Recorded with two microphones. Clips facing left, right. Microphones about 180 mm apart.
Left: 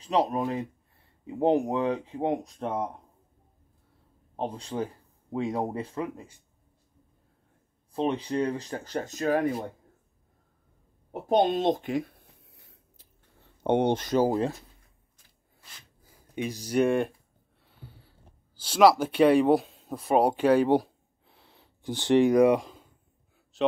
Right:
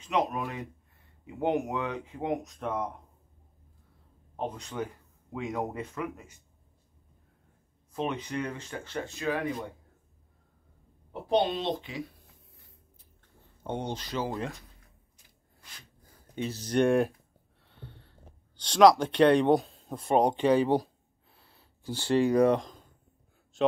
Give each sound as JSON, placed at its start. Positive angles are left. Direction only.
{"t": 0.0, "sound": "speech", "side_deg": 35}
{"t": 4.4, "sound": "speech", "side_deg": 30}
{"t": 7.9, "sound": "speech", "side_deg": 30}
{"t": 11.1, "sound": "a woman's voice", "side_deg": 45}
{"t": 12.4, "sound": "a sound", "side_deg": 90}
{"t": 13.7, "sound": "a woman's voice", "side_deg": 65}
{"t": 16.0, "sound": "speech", "side_deg": 10}
{"t": 17.6, "sound": "a sound", "side_deg": 5}
{"t": 18.6, "sound": "speech", "side_deg": 5}